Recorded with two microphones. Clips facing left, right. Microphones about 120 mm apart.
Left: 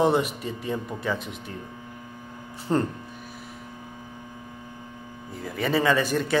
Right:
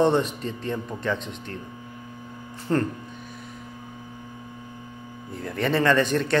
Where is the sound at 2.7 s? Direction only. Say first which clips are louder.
Even; 15° left (ahead or behind).